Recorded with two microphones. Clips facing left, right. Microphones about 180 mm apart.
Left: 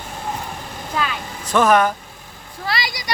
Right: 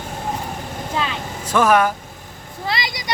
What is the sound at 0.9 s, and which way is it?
Vehicle, 25° right (ahead or behind).